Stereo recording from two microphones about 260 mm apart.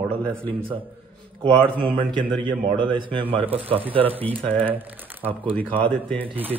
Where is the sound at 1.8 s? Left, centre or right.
Centre.